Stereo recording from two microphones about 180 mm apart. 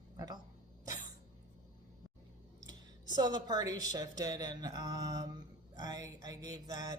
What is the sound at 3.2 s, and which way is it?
Speech, 20° right (ahead or behind).